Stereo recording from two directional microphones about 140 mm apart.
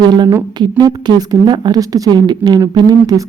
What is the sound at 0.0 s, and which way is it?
Speech, 30° right (ahead or behind).